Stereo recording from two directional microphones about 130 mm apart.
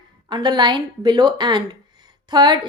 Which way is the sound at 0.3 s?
35° right (ahead or behind).